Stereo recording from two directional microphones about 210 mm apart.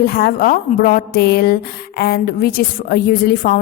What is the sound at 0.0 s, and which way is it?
A woman's voice, 45° left (ahead or behind).